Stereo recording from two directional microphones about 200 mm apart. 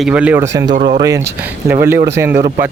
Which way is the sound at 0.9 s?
15° right (ahead or behind).